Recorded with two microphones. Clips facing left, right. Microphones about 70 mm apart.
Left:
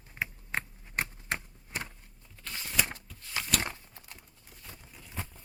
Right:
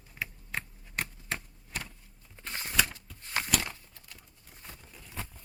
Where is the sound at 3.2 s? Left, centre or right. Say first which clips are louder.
Right 4 dB; right.